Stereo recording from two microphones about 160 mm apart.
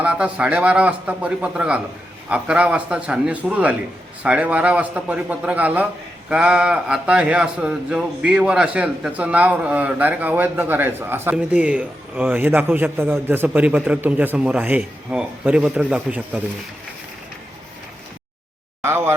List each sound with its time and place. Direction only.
0.0 s a man's voice: 10° right (ahead or behind)
18.8 s speech: 15° right (ahead or behind)